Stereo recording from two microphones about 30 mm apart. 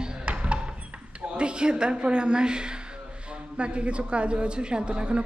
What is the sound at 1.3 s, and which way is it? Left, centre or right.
A woman's voice, right.